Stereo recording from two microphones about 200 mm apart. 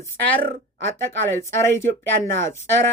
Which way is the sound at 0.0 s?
10° left (ahead or behind).